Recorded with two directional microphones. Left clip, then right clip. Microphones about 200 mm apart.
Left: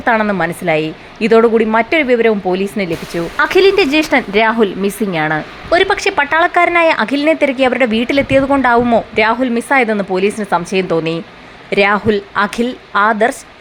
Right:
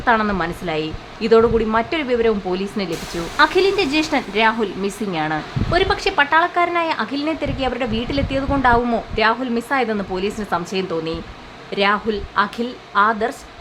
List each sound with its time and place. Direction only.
0.0 s a woman's voice: 15° left (ahead or behind)
3.3 s speech: 25° left (ahead or behind)